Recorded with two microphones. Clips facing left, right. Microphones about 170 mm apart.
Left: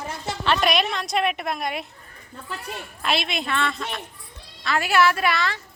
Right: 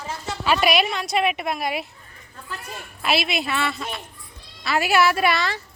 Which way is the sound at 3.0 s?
5° right (ahead or behind).